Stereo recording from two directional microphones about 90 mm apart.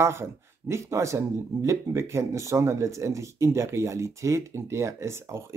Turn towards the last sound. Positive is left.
turn(degrees=-30)  # may be behind; listen again after turning